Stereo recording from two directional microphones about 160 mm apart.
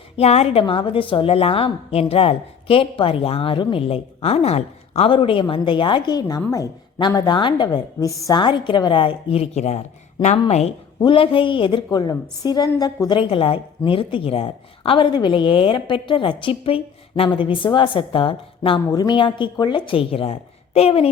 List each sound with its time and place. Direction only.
0.2 s a woman's voice: 40° left (ahead or behind)